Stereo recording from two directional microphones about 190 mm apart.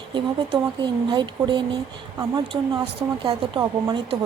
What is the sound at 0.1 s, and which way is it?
Speech, 25° right (ahead or behind).